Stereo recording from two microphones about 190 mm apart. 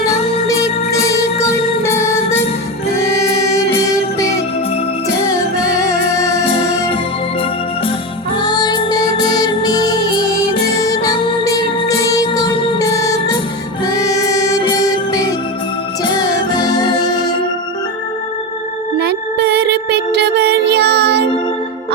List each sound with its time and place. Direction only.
0.1 s music: 15° left (ahead or behind)
5.2 s music: 15° left (ahead or behind)
8.4 s music: 20° left (ahead or behind)
18.9 s music: 60° right (ahead or behind)